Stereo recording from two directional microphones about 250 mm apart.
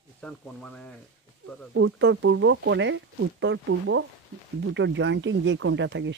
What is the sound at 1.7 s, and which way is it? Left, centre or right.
Speech, right.